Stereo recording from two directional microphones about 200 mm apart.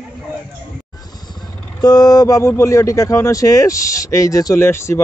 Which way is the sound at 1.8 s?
20° left (ahead or behind).